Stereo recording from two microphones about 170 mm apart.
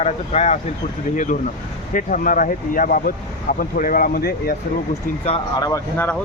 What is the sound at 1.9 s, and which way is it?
Speech, 50° left (ahead or behind).